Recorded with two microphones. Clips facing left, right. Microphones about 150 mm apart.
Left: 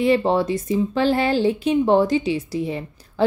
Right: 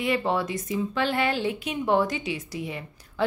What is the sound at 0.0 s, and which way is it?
Speech, 30° left (ahead or behind).